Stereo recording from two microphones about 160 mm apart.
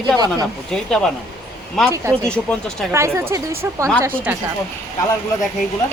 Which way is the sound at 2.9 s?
15° right (ahead or behind).